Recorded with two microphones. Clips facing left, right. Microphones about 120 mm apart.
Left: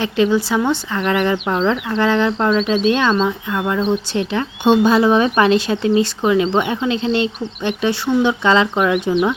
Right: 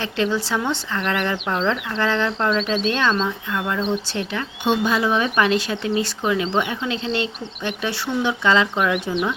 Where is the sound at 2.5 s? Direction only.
5° left (ahead or behind).